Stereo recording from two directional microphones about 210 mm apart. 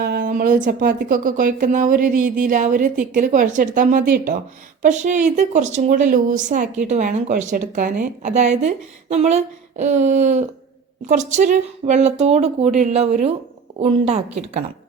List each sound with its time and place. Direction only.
0.0 s a woman's voice: 45° right (ahead or behind)